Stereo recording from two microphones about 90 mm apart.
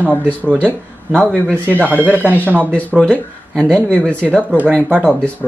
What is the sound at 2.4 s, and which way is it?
Speech, 20° right (ahead or behind).